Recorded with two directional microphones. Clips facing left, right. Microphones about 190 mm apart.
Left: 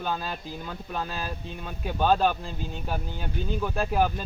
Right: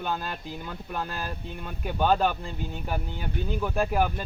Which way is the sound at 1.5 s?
5° left (ahead or behind).